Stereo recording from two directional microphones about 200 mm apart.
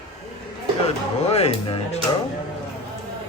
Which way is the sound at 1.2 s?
30° left (ahead or behind).